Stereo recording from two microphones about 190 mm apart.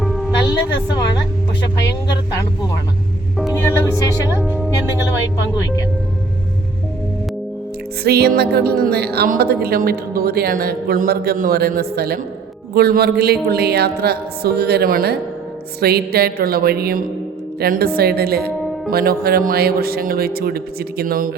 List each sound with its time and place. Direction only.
0.0 s music: centre (ahead or behind)
3.5 s a woman's voice: 15° left (ahead or behind)
4.4 s speech: 10° right (ahead or behind)
8.0 s a woman's voice: 55° right (ahead or behind)